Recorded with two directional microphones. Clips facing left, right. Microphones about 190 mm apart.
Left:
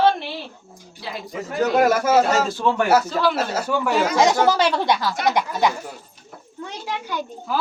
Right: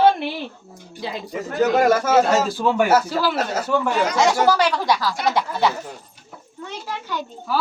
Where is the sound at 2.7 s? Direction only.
10° right (ahead or behind).